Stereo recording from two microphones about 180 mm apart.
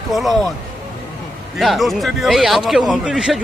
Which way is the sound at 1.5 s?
Centre (ahead or behind).